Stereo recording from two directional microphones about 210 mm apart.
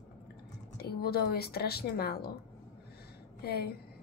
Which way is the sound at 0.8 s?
50° left (ahead or behind).